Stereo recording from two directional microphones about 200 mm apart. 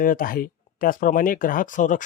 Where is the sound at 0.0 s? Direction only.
45° left (ahead or behind).